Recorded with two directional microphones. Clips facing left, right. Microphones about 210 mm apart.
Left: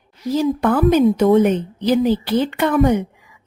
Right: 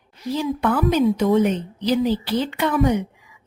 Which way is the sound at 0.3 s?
40° left (ahead or behind).